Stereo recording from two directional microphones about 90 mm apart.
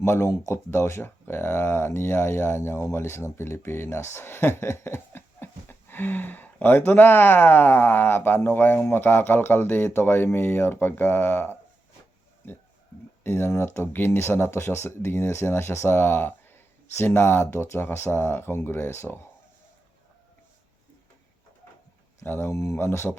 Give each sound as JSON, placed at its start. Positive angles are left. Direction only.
{"t": 0.0, "sound": "speech", "side_deg": 30}
{"t": 13.2, "sound": "speech", "side_deg": 30}
{"t": 22.2, "sound": "speech", "side_deg": 25}